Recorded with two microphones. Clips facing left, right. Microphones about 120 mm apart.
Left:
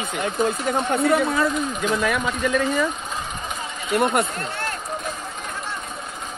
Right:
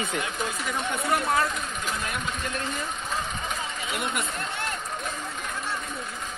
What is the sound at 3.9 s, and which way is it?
Speech, 60° left (ahead or behind).